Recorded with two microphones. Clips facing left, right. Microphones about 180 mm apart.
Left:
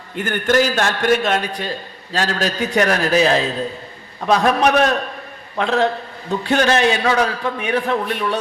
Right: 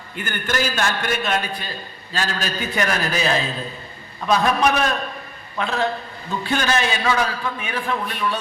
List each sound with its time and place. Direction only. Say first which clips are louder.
0.2 s a man's voice: left 8 dB; 80° left